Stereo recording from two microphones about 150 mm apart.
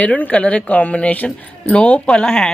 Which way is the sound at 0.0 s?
10° left (ahead or behind).